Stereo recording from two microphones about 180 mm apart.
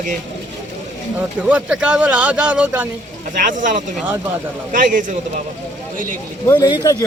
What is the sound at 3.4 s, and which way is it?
A man's voice, 45° right (ahead or behind).